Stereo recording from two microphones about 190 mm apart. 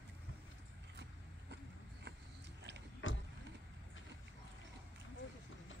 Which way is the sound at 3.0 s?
90° left.